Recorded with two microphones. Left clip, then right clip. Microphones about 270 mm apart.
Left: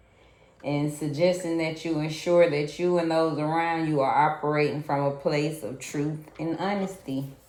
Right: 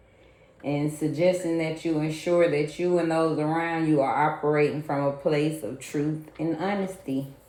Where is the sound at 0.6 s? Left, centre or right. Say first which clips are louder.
Right 1 dB; left.